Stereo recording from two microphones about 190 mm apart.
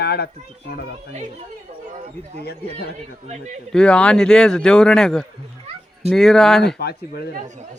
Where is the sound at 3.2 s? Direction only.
35° right (ahead or behind).